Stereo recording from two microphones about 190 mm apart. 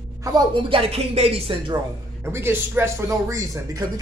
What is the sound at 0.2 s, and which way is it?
Speech, 20° right (ahead or behind).